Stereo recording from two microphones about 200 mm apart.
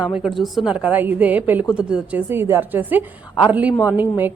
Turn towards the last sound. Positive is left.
turn(degrees=-10)  # may be behind; listen again after turning